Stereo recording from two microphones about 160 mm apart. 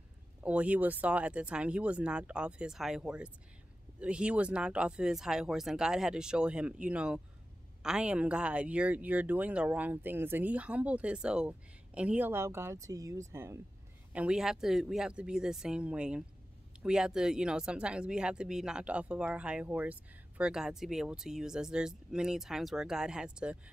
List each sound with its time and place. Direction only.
0.4 s speech: 10° right (ahead or behind)
14.1 s speech: 5° right (ahead or behind)